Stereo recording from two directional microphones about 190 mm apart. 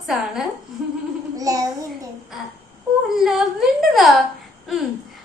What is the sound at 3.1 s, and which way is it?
A woman's voice, centre (ahead or behind).